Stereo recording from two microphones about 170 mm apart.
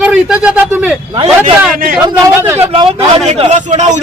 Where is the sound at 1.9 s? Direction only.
10° right (ahead or behind).